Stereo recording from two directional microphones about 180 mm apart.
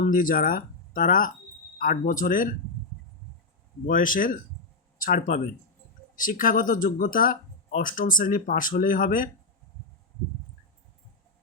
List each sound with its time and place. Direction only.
0.0 s speech: 50° left (ahead or behind)
3.8 s speech: 50° left (ahead or behind)